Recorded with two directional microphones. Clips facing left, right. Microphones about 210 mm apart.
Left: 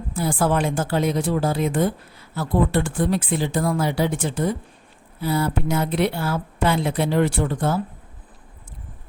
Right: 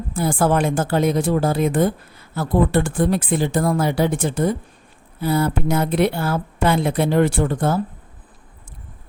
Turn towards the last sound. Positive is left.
turn(degrees=-50)  # may be behind; listen again after turning